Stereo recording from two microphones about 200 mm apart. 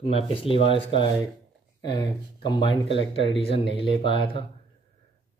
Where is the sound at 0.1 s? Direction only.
25° left (ahead or behind).